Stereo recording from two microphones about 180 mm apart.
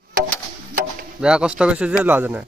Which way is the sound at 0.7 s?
55° right (ahead or behind).